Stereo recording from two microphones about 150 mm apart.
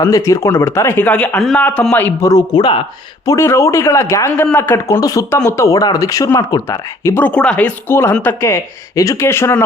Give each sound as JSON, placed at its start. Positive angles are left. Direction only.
{"t": 0.0, "sound": "speech", "side_deg": 20}
{"t": 3.2, "sound": "a man's voice", "side_deg": 20}